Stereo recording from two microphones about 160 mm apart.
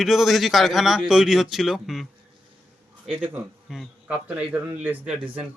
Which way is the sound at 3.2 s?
10° right (ahead or behind).